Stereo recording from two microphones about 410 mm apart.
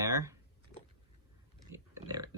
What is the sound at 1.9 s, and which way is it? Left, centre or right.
Pig, centre.